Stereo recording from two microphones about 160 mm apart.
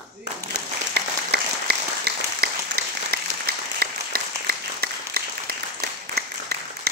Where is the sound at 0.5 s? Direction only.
90° right.